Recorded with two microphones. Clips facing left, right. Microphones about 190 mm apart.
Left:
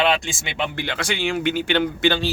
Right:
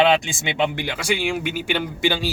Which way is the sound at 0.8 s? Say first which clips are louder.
Right 1 dB; 10° right (ahead or behind).